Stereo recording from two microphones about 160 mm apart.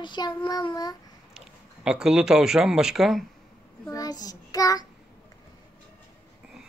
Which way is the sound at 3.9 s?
25° left (ahead or behind).